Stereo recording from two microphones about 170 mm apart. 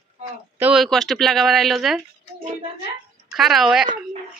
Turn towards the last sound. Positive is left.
turn(degrees=0)  # may be behind; listen again after turning